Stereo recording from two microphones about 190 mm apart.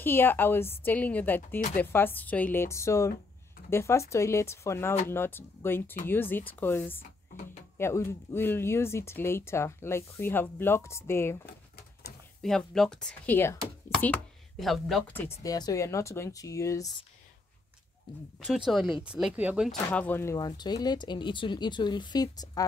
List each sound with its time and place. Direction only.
0.0 s speech: 10° left (ahead or behind)
12.4 s speech: 5° left (ahead or behind)
14.6 s speech: centre (ahead or behind)
15.2 s speech: 20° left (ahead or behind)
18.7 s speech: centre (ahead or behind)
19.9 s speech: 10° left (ahead or behind)